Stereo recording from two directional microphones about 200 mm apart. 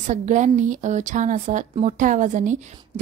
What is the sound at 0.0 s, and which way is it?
A woman's voice, 40° right (ahead or behind).